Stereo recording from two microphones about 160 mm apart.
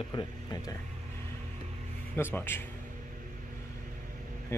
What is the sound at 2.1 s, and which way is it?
Speech, 15° left (ahead or behind).